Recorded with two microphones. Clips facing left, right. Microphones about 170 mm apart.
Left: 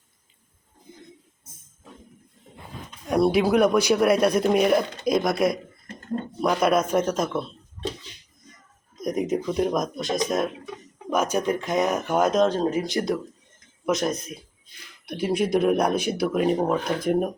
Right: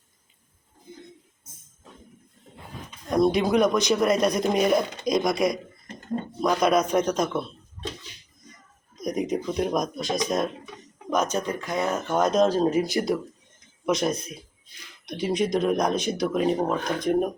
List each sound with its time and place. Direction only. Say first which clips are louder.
3.1 s speech: left 1 dB; 5° left (ahead or behind)
9.0 s speech: left 2 dB; centre (ahead or behind)
12.5 s speech: right 2 dB; 10° right (ahead or behind)